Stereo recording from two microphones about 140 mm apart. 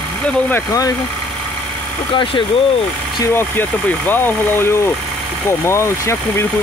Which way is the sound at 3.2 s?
15° left (ahead or behind).